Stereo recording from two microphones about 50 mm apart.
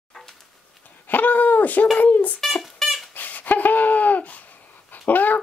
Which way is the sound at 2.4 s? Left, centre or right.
Centre.